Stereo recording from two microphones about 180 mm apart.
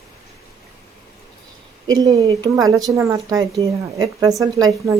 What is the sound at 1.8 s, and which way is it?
Speech, 20° right (ahead or behind).